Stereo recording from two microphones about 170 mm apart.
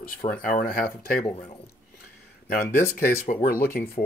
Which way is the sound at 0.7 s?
60° left (ahead or behind).